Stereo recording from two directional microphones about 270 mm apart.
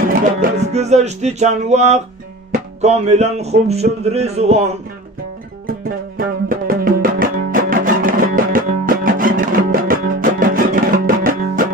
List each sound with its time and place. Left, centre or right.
0.1 s music: right
5.7 s music: right